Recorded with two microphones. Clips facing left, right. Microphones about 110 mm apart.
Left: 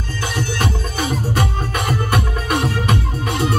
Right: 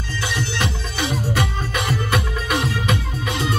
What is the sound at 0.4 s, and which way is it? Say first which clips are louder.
Music: left 6 dB; 45° left (ahead or behind).